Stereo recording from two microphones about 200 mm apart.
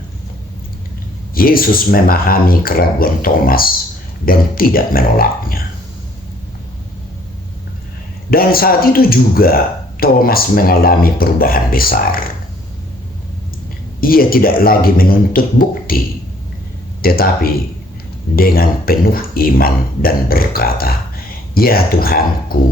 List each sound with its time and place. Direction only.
1.3 s speech: 45° left (ahead or behind)
8.3 s speech: 50° left (ahead or behind)
14.0 s speech: 45° left (ahead or behind)
17.0 s speech: 50° left (ahead or behind)